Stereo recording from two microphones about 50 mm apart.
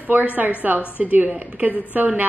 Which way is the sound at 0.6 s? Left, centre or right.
Right.